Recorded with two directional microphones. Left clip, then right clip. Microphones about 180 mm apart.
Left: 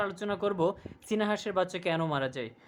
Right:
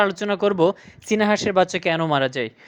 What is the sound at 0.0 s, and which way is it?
A man's voice, 30° right (ahead or behind).